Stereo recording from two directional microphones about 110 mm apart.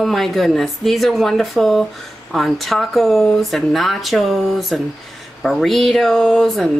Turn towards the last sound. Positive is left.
turn(degrees=5)  # may be behind; listen again after turning